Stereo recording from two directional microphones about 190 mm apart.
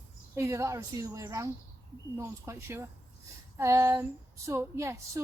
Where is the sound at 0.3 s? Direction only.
15° right (ahead or behind).